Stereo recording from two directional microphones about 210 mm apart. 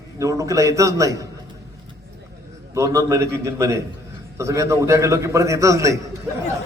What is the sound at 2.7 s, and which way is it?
A man's voice, 15° right (ahead or behind).